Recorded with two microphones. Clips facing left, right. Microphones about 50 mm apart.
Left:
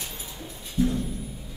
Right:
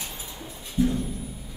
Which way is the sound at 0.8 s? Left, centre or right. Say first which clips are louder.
Right 1 dB; centre.